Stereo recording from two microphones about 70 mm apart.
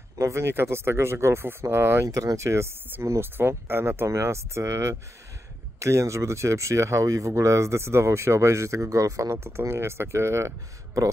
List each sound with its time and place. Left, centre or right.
0.2 s speech: right
2.0 s speech: right